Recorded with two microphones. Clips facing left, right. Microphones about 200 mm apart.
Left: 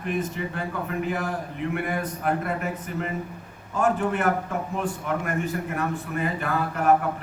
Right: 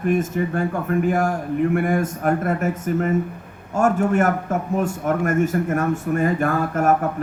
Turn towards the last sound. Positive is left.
turn(degrees=-45)  # may be behind; listen again after turning